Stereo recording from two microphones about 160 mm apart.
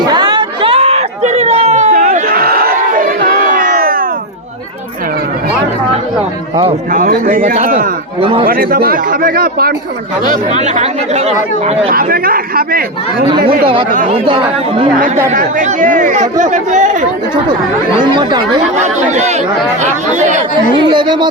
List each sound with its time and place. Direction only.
0.0 s a sound: 25° right (ahead or behind); by 1.9 s 45° right (ahead or behind)
1.9 s crowd: 60° right (ahead or behind)
6.9 s a man's voice: 60° right (ahead or behind)
7.4 s speech: 45° right (ahead or behind)
8.4 s speech: 65° right (ahead or behind)
10.2 s speech: 45° right (ahead or behind)
11.9 s a man's voice: 65° right (ahead or behind)
14.3 s speech: 35° right (ahead or behind)
15.3 s speech: 55° right (ahead or behind)
18.0 s speech: 30° right (ahead or behind)
18.8 s speech: 45° right (ahead or behind)
20.7 s speech: 30° right (ahead or behind)